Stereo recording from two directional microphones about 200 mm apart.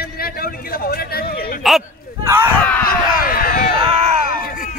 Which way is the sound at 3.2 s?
45° left (ahead or behind).